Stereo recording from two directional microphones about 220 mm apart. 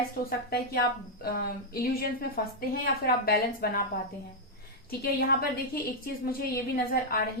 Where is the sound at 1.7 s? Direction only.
40° left (ahead or behind).